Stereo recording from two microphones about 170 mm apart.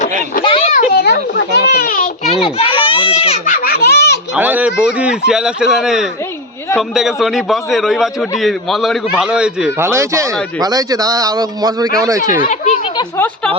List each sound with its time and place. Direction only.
0.4 s a sound: 35° left (ahead or behind)
1.5 s a child's voice: 70° left (ahead or behind)
2.6 s a sound: 30° left (ahead or behind); by 4.2 s 75° left (ahead or behind)
4.4 s a man's voice: 10° right (ahead or behind)
12.4 s speech: 45° left (ahead or behind)
13.0 s speech: 10° left (ahead or behind)